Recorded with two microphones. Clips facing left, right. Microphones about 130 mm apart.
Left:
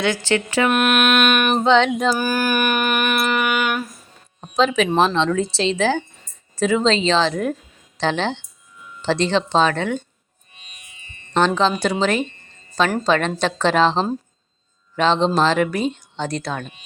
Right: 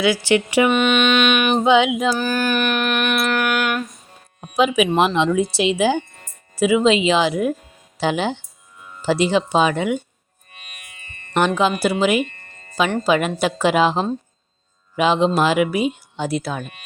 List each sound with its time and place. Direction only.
0.0 s speech: 10° right (ahead or behind)
0.7 s a sound: 5° left (ahead or behind)
1.6 s speech: 10° right (ahead or behind)
2.1 s a sound: 10° left (ahead or behind)
4.5 s speech: 10° right (ahead or behind)
10.5 s music: 60° right (ahead or behind)
11.3 s speech: 10° right (ahead or behind)
12.2 s music: 60° right (ahead or behind)
13.1 s speech: 10° right (ahead or behind)